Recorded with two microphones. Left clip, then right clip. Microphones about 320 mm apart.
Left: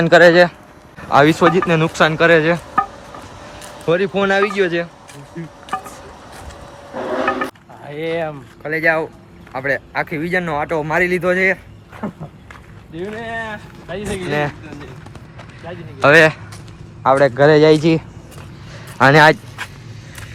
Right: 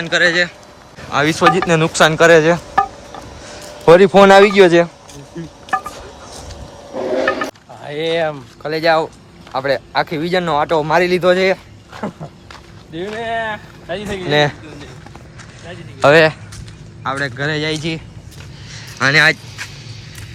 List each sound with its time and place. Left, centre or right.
0.0 s a man's voice: centre
3.8 s a man's voice: centre
7.9 s speech: right
8.6 s a man's voice: centre
12.0 s speech: right
16.0 s a man's voice: centre
17.0 s speech: centre